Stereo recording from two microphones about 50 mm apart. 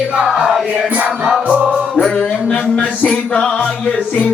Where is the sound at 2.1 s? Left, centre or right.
Centre.